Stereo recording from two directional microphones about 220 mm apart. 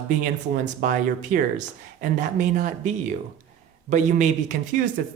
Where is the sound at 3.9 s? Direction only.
35° right (ahead or behind).